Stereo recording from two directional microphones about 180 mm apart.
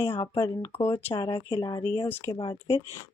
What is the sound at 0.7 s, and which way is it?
Speech, 30° left (ahead or behind).